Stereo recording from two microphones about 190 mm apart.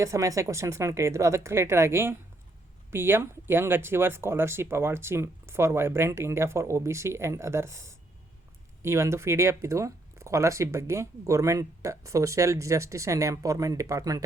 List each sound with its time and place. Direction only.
0.0 s speech: 15° right (ahead or behind)